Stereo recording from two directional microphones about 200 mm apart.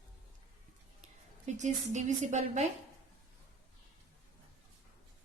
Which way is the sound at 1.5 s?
35° right (ahead or behind).